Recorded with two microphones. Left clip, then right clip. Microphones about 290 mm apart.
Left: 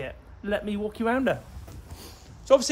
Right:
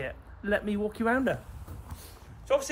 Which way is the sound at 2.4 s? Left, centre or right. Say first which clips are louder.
Left 7 dB; left.